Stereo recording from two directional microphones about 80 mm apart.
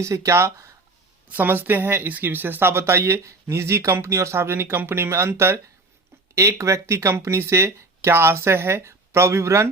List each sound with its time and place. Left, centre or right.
0.0 s speech: right
1.3 s speech: right